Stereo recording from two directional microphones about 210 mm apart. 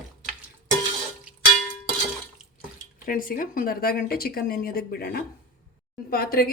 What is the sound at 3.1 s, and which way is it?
A woman's voice, 40° left (ahead or behind).